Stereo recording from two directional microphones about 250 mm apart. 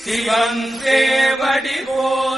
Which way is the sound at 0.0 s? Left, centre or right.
Centre.